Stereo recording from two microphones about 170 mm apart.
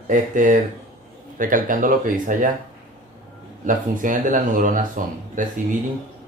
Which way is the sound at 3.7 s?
50° right (ahead or behind).